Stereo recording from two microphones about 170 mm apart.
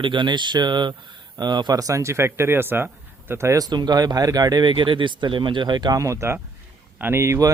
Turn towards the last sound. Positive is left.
turn(degrees=-15)  # may be behind; listen again after turning